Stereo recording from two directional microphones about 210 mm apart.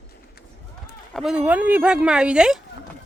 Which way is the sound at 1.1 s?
5° right (ahead or behind).